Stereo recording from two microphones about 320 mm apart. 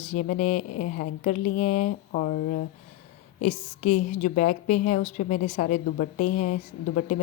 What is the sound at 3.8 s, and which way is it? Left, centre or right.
Speech, left.